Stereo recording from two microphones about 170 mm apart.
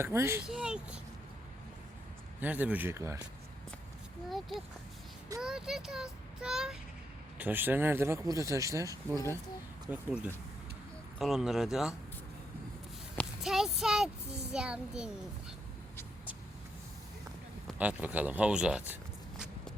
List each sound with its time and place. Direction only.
0.0 s speech: 15° right (ahead or behind)
0.4 s child singing: 5° right (ahead or behind)
2.4 s speech: 10° right (ahead or behind)
4.3 s child singing: centre (ahead or behind)
7.3 s speech: 10° right (ahead or behind)
9.9 s speech: 10° right (ahead or behind)
11.2 s child singing: centre (ahead or behind)
13.1 s a child's voice: centre (ahead or behind)
17.7 s speech: 10° right (ahead or behind)